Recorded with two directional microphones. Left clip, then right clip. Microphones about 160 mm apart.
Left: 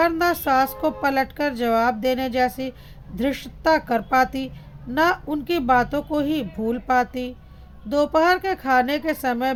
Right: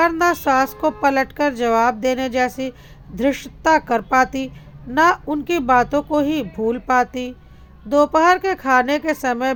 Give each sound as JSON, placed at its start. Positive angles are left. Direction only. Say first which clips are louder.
{"t": 0.0, "sound": "a woman's voice", "louder": "right 3 dB", "side_deg": -20}